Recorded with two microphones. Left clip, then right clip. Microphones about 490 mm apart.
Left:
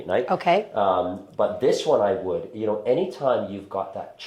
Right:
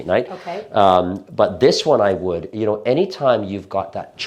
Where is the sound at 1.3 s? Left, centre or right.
Right.